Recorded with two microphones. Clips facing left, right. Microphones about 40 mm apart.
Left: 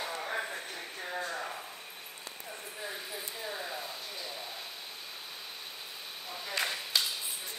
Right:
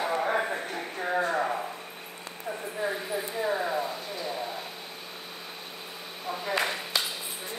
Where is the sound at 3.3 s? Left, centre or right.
Right.